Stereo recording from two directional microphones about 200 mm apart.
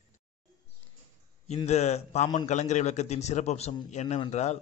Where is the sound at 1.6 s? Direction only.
35° left (ahead or behind).